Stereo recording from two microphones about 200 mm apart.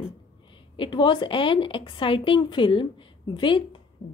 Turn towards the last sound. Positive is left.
turn(degrees=25)  # may be behind; listen again after turning